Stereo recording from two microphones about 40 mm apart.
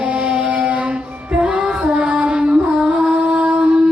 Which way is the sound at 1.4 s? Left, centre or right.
Right.